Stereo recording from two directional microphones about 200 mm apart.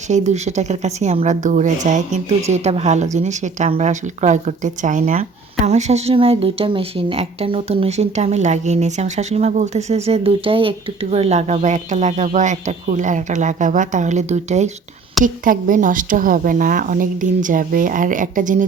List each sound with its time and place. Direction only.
0.1 s speech: 35° right (ahead or behind)